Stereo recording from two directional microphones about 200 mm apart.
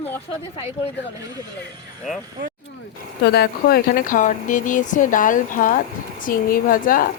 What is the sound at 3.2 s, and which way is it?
A woman's voice, 55° left (ahead or behind).